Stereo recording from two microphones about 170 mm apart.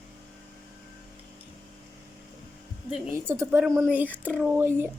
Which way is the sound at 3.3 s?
15° right (ahead or behind).